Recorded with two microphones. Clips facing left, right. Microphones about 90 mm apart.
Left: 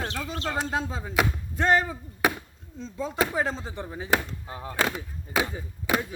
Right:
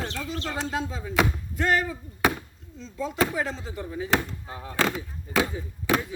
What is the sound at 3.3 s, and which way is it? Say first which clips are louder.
Speech: left 2 dB; 25° left (ahead or behind).